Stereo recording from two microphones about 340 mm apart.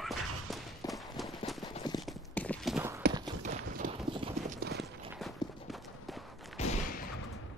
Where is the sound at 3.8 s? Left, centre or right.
Right.